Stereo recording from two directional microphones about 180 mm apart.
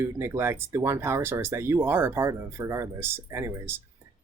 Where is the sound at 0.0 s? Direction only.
15° right (ahead or behind).